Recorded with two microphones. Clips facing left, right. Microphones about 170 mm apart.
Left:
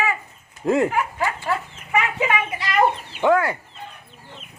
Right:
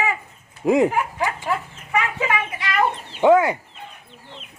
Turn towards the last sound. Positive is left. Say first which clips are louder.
# right 4 dB
turn(degrees=-20)  # may be behind; listen again after turning